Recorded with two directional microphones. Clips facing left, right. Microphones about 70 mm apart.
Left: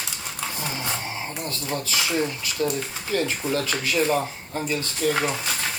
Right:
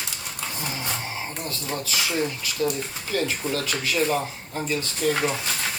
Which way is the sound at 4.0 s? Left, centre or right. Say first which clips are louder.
Left 2 dB; centre.